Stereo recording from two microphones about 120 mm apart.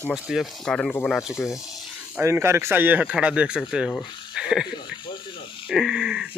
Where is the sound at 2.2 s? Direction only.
20° right (ahead or behind).